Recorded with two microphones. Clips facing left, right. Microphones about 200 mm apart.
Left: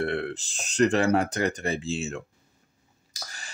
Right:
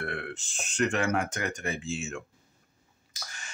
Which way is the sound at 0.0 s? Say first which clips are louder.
Left 7 dB; 35° left (ahead or behind).